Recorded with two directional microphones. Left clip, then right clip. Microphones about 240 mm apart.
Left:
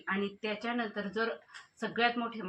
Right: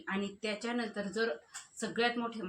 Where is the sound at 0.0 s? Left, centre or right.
Centre.